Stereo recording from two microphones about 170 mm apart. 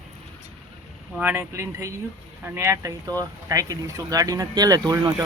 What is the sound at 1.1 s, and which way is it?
Speech, 10° right (ahead or behind).